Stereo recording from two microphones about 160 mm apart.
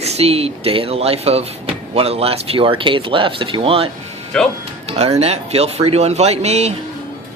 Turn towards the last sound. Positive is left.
turn(degrees=-40)  # may be behind; listen again after turning